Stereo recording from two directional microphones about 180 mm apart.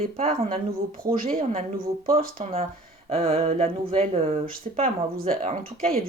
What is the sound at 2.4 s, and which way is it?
Speech, 35° right (ahead or behind).